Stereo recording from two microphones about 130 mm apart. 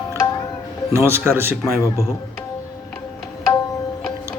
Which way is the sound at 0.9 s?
20° right (ahead or behind).